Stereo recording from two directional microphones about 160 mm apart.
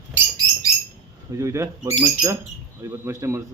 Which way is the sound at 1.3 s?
20° right (ahead or behind).